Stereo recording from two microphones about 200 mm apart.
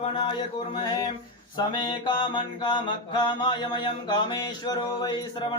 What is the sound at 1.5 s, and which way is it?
Mantra, 20° left (ahead or behind).